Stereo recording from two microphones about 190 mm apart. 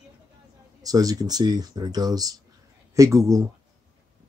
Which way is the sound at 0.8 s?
20° right (ahead or behind).